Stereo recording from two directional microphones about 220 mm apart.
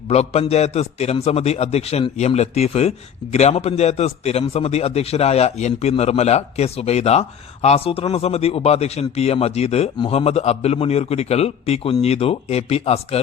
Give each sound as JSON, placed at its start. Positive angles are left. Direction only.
{"t": 0.1, "sound": "a man's voice", "side_deg": 30}